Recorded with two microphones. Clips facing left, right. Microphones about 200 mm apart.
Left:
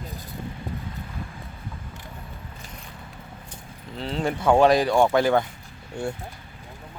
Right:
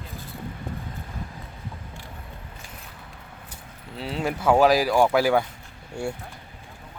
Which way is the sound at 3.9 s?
5° right (ahead or behind).